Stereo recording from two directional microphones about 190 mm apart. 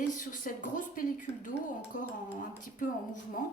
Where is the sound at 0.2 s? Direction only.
45° left (ahead or behind).